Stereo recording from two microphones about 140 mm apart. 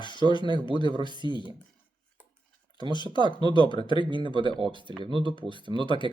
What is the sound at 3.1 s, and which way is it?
Speech, 35° left (ahead or behind).